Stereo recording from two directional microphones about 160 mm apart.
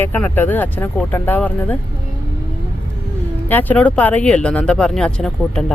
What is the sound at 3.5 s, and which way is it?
Speech, 10° left (ahead or behind).